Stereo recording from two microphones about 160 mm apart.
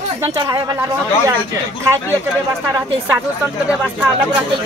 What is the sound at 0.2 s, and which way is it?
Speech, 20° right (ahead or behind).